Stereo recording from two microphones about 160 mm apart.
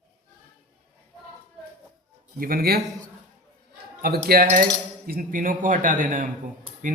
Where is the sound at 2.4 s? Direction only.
65° right (ahead or behind).